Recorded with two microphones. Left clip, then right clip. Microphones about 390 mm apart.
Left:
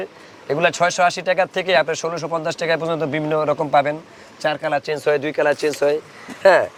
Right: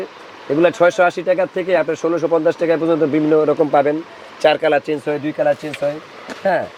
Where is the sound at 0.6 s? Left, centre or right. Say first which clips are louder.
Right 4 dB; left.